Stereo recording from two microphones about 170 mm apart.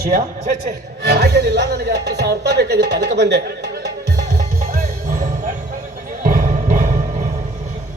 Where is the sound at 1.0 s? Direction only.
80° right.